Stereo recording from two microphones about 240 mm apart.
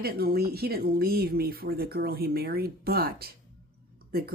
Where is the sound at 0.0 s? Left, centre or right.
Right.